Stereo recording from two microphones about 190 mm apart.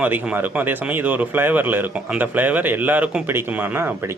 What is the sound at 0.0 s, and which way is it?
Speech, 10° right (ahead or behind).